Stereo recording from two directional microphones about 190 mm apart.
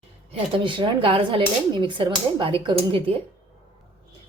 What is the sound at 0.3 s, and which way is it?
Speech, 25° right (ahead or behind).